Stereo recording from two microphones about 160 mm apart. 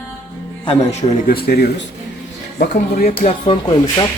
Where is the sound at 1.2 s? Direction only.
75° left (ahead or behind).